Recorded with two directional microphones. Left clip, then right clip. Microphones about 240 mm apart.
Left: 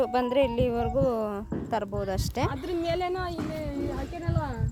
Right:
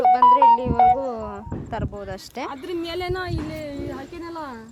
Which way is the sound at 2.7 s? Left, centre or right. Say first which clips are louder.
Right 3 dB; right.